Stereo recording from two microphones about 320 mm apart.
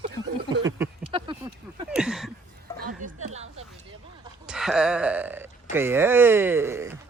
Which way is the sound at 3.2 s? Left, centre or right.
Centre.